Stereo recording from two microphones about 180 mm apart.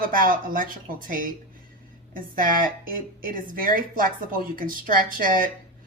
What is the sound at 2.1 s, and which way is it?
A woman's voice, 50° right (ahead or behind).